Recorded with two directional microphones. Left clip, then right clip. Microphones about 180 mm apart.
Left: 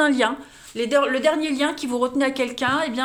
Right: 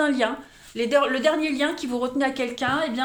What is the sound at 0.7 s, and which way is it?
A woman's voice, 25° left (ahead or behind).